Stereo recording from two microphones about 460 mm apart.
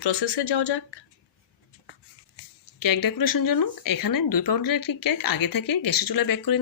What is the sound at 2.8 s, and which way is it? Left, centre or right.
Speech, left.